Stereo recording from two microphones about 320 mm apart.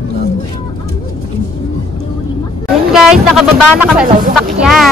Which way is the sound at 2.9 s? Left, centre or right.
Centre.